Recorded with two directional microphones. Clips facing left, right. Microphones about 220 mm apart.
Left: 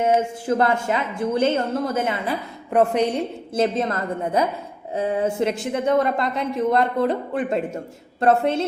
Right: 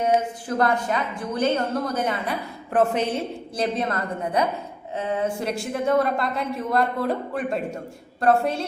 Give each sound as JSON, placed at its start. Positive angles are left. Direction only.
{"t": 0.4, "sound": "a woman's voice", "side_deg": 25}
{"t": 2.2, "sound": "a woman's voice", "side_deg": 10}